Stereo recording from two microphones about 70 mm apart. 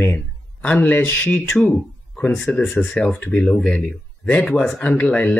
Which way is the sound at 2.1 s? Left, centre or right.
Left.